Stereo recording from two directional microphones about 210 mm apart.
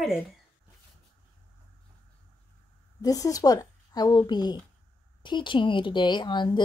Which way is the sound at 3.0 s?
15° left (ahead or behind).